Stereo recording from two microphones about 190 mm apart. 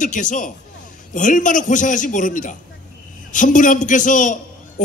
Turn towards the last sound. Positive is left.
turn(degrees=40)  # may be behind; listen again after turning